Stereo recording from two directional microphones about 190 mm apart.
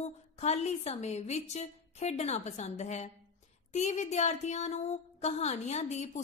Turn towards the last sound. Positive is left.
turn(degrees=35)  # may be behind; listen again after turning